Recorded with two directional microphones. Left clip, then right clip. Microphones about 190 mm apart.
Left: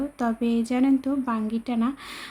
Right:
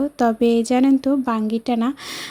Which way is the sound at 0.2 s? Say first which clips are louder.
Right 10 dB; 35° right (ahead or behind).